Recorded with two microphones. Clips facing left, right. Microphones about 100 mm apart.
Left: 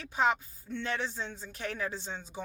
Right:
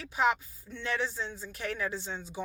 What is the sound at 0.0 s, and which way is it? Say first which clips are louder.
A woman's voice: right 1 dB; 30° left (ahead or behind).